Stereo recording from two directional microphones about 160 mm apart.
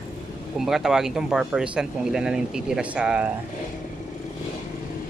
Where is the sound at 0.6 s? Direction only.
Centre (ahead or behind).